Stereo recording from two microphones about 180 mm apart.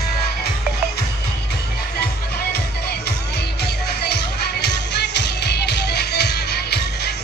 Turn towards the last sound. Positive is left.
turn(degrees=65)  # may be behind; listen again after turning